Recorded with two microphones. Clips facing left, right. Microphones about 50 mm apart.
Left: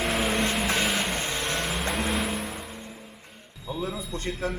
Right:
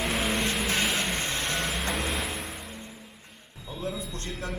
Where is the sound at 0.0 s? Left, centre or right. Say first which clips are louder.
Left 2 dB; centre.